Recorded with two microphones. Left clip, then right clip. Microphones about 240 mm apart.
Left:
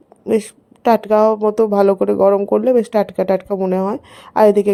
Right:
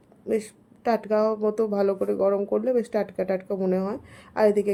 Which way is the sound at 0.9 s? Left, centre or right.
Left.